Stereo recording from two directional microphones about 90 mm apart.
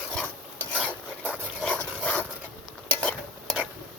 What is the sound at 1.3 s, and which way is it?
Dog, 15° left (ahead or behind).